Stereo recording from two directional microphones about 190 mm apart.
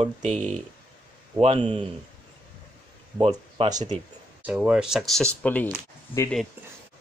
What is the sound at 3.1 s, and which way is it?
Speech, 25° right (ahead or behind).